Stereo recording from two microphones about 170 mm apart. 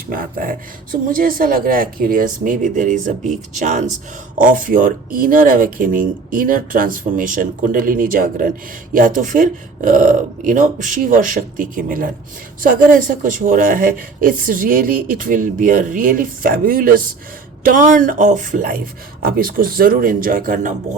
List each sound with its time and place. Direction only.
0.1 s a woman's voice: 55° right (ahead or behind)